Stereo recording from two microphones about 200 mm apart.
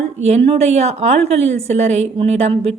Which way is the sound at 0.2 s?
30° right (ahead or behind).